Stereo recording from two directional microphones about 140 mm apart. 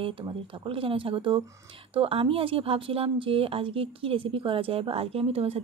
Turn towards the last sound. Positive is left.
turn(degrees=-45)  # may be behind; listen again after turning